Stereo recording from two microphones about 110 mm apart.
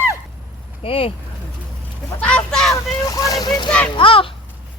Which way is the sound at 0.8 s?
55° left (ahead or behind).